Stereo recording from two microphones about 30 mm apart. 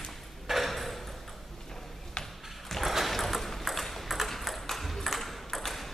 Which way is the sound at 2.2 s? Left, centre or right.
Left.